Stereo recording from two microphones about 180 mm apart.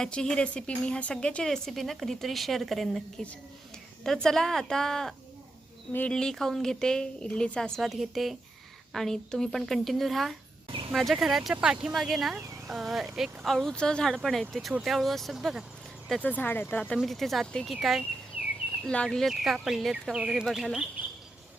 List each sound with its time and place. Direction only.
0.0 s speech: 5° left (ahead or behind)
10.7 s cricket: 30° right (ahead or behind)
10.9 s speech: centre (ahead or behind)
16.8 s speech: centre (ahead or behind)